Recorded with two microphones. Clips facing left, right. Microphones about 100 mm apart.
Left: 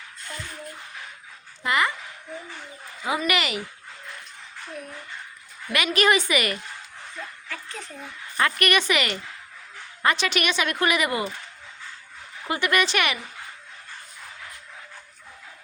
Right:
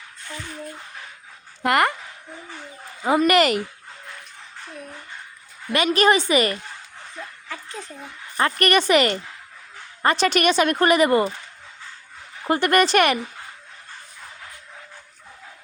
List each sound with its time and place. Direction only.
1.6 s speech: 55° right (ahead or behind)
3.2 s speech: 45° right (ahead or behind)
5.7 s speech: 35° right (ahead or behind)
8.4 s speech: 35° right (ahead or behind)
12.5 s speech: 45° right (ahead or behind)